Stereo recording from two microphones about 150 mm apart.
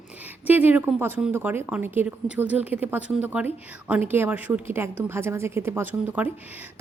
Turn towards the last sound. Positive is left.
turn(degrees=-10)  # may be behind; listen again after turning